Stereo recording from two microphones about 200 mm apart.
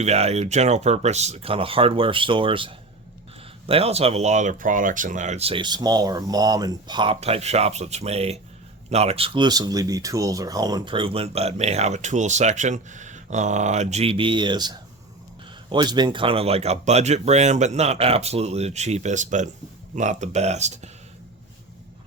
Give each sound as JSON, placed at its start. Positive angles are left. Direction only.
{"t": 0.0, "sound": "speech", "side_deg": -30}